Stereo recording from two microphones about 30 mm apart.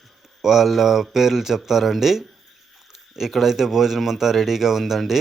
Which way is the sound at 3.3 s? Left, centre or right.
Centre.